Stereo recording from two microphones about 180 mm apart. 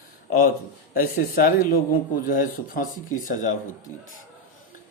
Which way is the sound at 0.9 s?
50° left (ahead or behind).